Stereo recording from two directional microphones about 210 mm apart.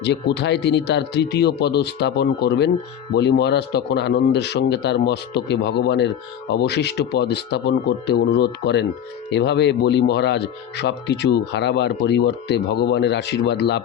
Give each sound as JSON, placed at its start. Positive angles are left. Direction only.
{"t": 0.0, "sound": "speech", "side_deg": 55}